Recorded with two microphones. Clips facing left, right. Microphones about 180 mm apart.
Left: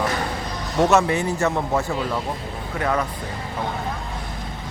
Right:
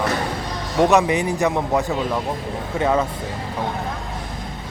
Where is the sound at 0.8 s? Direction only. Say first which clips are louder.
Right 2 dB; 15° right (ahead or behind).